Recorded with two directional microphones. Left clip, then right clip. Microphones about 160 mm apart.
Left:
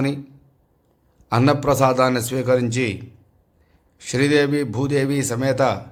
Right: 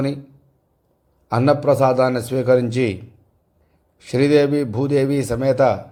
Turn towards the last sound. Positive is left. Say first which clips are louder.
# right 3 dB
turn(degrees=-15)  # may be behind; listen again after turning